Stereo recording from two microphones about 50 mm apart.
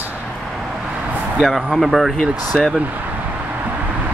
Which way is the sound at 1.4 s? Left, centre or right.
Centre.